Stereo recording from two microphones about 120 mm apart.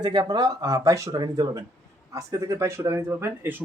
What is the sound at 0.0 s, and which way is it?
Speech, 35° right (ahead or behind).